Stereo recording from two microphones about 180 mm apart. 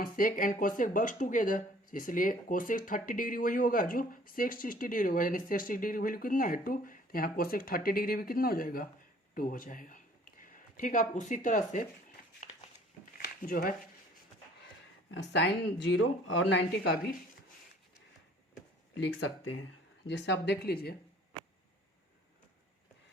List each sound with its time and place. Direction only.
0.0 s speech: 50° left (ahead or behind)
12.4 s a sound: 40° left (ahead or behind)
13.1 s a sound: 55° left (ahead or behind)
15.1 s speech: 80° left; by 17.1 s 65° left (ahead or behind)
19.0 s speech: 90° left
20.1 s speech: 75° left (ahead or behind)